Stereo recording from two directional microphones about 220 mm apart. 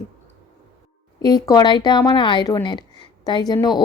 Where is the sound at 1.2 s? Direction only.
15° left (ahead or behind).